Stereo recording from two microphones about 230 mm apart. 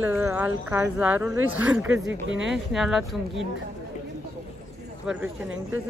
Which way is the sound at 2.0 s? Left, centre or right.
Right.